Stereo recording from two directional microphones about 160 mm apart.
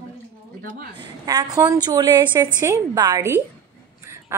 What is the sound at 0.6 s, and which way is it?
Speech, 60° right (ahead or behind).